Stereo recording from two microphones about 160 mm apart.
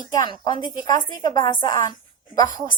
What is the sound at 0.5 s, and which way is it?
Speech, 55° right (ahead or behind).